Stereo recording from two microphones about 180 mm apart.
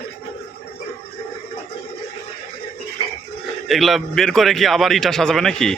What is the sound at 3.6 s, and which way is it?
A man's voice, centre (ahead or behind).